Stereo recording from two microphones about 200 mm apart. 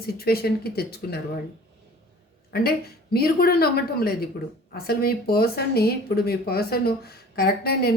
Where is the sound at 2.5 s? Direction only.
50° left (ahead or behind).